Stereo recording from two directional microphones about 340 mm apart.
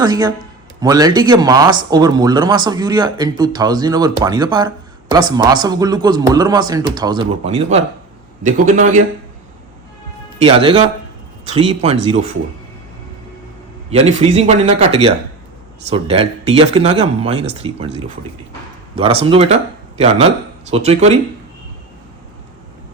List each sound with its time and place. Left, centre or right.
0.0 s speech: centre
10.4 s speech: centre
13.9 s speech: centre
20.7 s speech: centre